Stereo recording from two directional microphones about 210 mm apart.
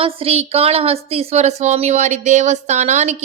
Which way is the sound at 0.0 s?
30° right (ahead or behind).